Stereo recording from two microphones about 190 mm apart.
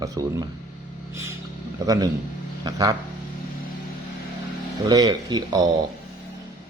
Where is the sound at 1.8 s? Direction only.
20° right (ahead or behind).